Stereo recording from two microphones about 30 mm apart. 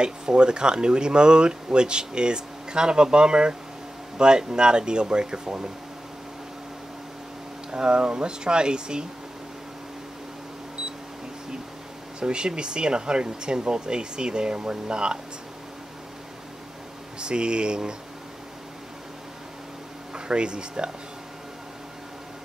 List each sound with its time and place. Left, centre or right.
0.0 s speech: right
7.7 s speech: right
12.2 s speech: right
17.2 s speech: right
20.2 s speech: right